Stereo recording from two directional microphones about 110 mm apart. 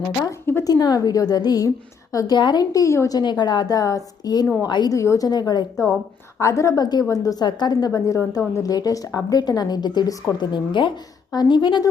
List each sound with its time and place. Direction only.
0.3 s a woman's voice: 25° left (ahead or behind)
0.7 s a woman's voice: 35° left (ahead or behind)
3.2 s a woman's voice: 40° left (ahead or behind)